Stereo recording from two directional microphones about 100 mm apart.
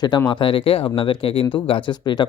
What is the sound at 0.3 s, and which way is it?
Speech, 55° left (ahead or behind).